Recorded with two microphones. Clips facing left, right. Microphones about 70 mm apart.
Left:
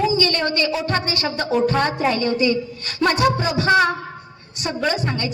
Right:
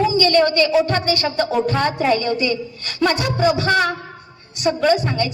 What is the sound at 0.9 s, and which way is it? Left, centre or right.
A woman's voice, centre.